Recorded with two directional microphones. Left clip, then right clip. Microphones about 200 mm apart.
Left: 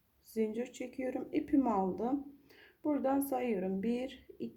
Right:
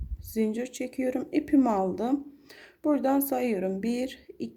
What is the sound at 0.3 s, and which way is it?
A woman's voice, 35° right (ahead or behind).